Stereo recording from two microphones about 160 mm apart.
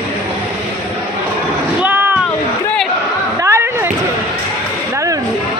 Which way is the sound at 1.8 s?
10° right (ahead or behind).